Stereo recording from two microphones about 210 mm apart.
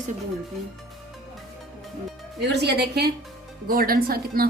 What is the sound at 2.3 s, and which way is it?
A woman's voice, 50° right (ahead or behind).